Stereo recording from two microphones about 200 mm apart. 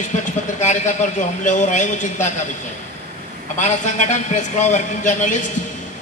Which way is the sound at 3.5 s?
40° left (ahead or behind).